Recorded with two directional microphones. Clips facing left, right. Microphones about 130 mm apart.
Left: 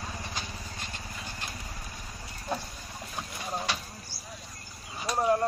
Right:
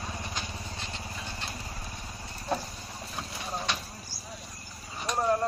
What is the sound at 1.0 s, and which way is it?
Horse, 20° right (ahead or behind).